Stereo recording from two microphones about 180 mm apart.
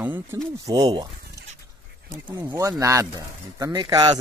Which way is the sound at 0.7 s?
25° right (ahead or behind).